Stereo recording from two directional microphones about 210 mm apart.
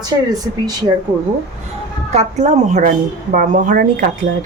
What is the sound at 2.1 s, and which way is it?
A woman's voice, 30° right (ahead or behind).